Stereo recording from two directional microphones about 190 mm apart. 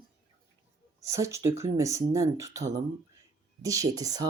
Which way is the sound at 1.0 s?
15° right (ahead or behind).